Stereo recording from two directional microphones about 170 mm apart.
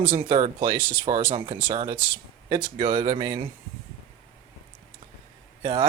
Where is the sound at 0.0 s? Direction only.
30° right (ahead or behind).